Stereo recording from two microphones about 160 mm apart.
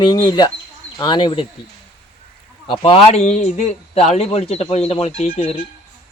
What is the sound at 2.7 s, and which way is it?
A man's voice, 35° left (ahead or behind).